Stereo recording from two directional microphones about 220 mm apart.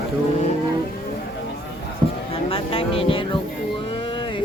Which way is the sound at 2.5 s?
25° left (ahead or behind).